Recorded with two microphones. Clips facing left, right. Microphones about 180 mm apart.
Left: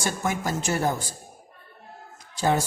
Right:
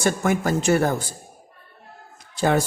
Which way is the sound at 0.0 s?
60° right (ahead or behind).